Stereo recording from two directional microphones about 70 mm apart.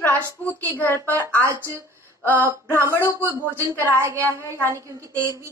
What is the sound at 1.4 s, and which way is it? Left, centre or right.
A woman's voice, right.